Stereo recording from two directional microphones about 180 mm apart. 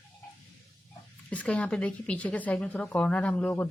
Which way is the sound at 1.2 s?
5° left (ahead or behind).